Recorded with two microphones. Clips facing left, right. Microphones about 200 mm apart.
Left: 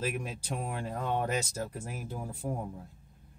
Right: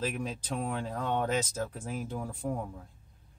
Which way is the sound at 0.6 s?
10° left (ahead or behind).